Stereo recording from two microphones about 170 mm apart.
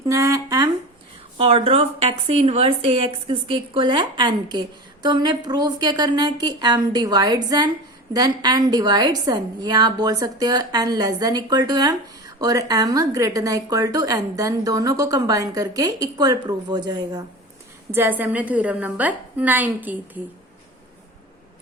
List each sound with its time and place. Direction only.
0.0 s a sound: 20° right (ahead or behind)
1.4 s a woman's voice: 35° right (ahead or behind)
17.9 s a woman's voice: 10° right (ahead or behind)